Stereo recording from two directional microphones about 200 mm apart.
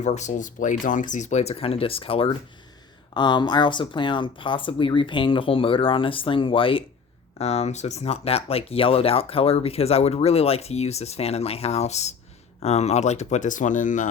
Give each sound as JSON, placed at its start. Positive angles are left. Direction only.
{"t": 0.0, "sound": "speech", "side_deg": 35}